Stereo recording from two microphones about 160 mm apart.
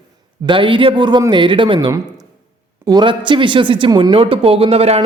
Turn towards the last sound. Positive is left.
turn(degrees=-40)  # may be behind; listen again after turning